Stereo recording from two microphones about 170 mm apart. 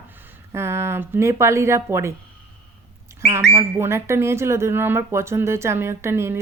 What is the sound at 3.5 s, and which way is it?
Speech, 15° right (ahead or behind).